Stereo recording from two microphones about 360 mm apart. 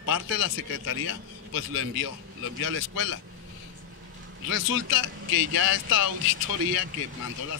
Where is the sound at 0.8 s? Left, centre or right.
Left.